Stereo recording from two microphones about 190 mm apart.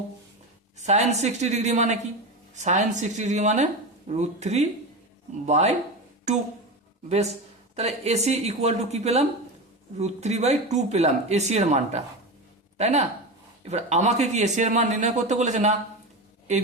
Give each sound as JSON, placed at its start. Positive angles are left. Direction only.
{"t": 0.8, "sound": "a man's voice", "side_deg": -35}
{"t": 7.8, "sound": "a man's voice", "side_deg": -35}